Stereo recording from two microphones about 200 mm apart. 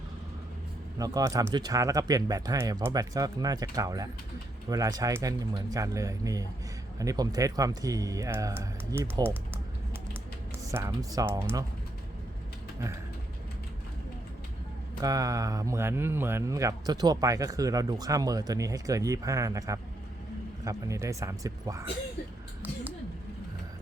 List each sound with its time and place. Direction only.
0.9 s speech: 20° right (ahead or behind)
10.7 s speech: 15° right (ahead or behind)
15.0 s speech: 15° right (ahead or behind)